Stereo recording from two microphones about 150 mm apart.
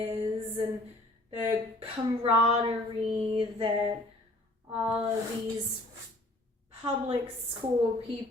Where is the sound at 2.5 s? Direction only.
40° right (ahead or behind).